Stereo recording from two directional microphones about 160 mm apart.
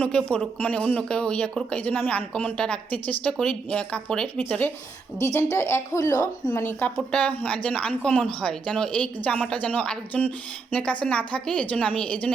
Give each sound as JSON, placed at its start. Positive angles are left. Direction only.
{"t": 0.0, "sound": "speech", "side_deg": 5}